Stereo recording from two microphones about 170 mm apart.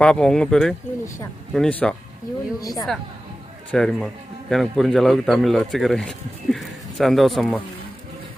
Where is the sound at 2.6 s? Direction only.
20° left (ahead or behind).